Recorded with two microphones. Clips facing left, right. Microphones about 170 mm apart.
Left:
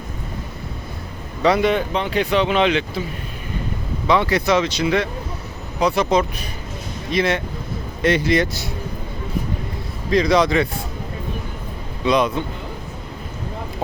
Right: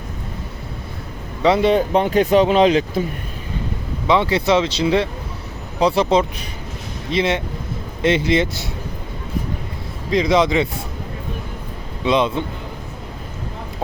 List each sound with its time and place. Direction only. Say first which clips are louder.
1.4 s a man's voice: right 2 dB; 25° right (ahead or behind)
1.9 s speech: right 5 dB; 45° right (ahead or behind)
4.0 s speech: right 1 dB; 20° right (ahead or behind)
10.1 s speech: even; 20° right (ahead or behind)
12.0 s speech: even; 25° right (ahead or behind)